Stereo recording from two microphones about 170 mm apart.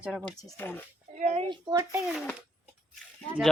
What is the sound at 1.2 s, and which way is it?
Speech, 40° right (ahead or behind).